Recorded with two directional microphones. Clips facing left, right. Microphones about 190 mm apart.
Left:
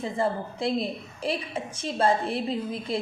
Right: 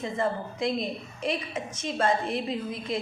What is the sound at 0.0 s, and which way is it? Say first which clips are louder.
A woman's voice: left 1 dB; 30° left (ahead or behind).